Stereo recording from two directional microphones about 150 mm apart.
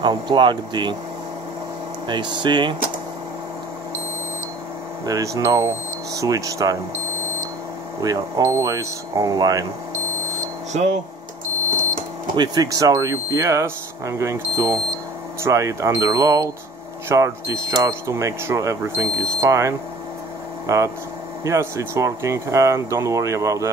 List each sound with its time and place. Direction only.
0.0 s speech: 30° right (ahead or behind)
2.0 s speech: 30° right (ahead or behind)
5.0 s speech: 20° right (ahead or behind)
8.0 s speech: 25° right (ahead or behind)
12.4 s speech: 25° right (ahead or behind)